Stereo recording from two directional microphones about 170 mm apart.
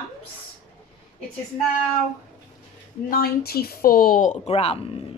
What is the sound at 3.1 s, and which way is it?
A woman's voice, 65° left (ahead or behind).